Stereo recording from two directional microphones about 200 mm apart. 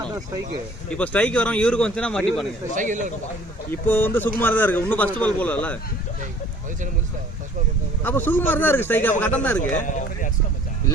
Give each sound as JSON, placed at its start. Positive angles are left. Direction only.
{"t": 0.9, "sound": "speech", "side_deg": 5}
{"t": 2.7, "sound": "speech", "side_deg": -40}
{"t": 3.7, "sound": "a man's voice", "side_deg": 10}
{"t": 8.0, "sound": "a man's voice", "side_deg": 10}
{"t": 9.7, "sound": "speech", "side_deg": 40}